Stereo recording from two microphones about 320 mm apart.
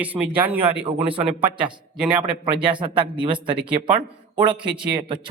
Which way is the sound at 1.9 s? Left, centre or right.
Centre.